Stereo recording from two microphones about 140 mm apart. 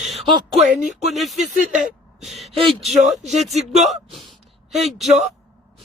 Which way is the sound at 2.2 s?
Centre (ahead or behind).